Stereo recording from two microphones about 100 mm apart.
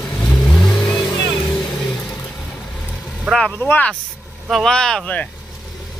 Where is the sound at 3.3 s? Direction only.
10° left (ahead or behind).